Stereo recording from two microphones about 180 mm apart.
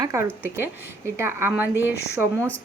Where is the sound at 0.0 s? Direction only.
15° right (ahead or behind).